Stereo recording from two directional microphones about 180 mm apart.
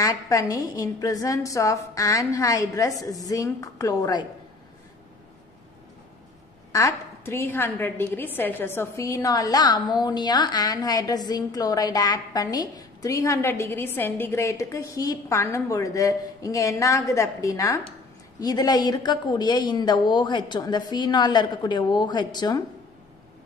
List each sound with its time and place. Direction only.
0.0 s a woman's voice: 20° left (ahead or behind)
6.7 s a woman's voice: 15° left (ahead or behind)